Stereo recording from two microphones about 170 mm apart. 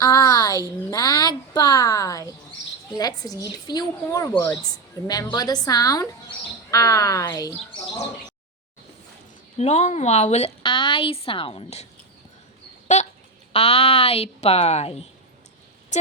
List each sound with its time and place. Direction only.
0.0 s a sound: 20° left (ahead or behind)
1.5 s a woman's voice: 20° left (ahead or behind)
9.6 s a woman's voice: 40° left (ahead or behind)
10.6 s a woman's voice: 30° left (ahead or behind)
12.9 s a sound: 45° left (ahead or behind)
13.5 s a woman's voice: 35° left (ahead or behind)